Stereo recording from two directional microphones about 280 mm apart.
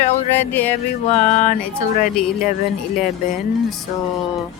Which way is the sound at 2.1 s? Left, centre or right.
Centre.